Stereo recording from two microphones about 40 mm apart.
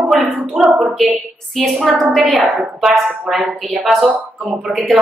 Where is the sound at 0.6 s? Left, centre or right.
Centre.